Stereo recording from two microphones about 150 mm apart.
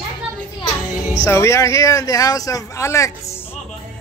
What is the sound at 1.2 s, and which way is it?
Speech, 20° left (ahead or behind).